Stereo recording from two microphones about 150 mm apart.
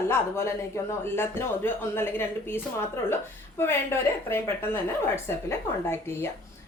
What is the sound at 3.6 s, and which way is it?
A woman's voice, 15° left (ahead or behind).